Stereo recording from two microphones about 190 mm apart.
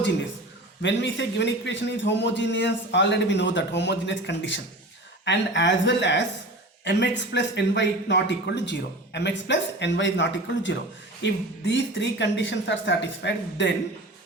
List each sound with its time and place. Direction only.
0.8 s a man's voice: 70° left (ahead or behind)